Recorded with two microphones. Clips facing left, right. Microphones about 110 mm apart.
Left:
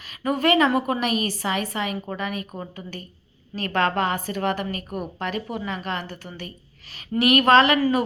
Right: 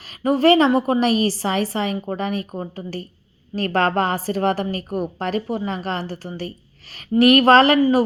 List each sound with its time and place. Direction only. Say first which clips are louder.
0.2 s a woman's voice: right 5 dB; 35° right (ahead or behind)